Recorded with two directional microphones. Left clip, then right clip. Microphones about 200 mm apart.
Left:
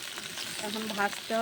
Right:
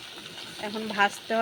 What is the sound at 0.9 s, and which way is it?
Speech, 15° right (ahead or behind).